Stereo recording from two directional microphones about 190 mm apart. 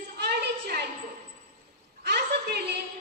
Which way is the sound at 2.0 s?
55° right (ahead or behind).